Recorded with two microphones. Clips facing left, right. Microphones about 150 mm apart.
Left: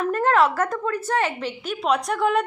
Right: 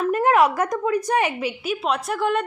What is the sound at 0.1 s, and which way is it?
Speech, 15° right (ahead or behind).